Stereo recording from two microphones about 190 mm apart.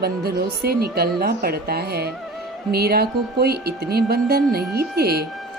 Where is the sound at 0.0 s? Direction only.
55° right (ahead or behind).